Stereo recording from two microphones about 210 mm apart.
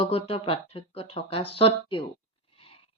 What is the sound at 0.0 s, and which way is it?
Speech, 25° left (ahead or behind).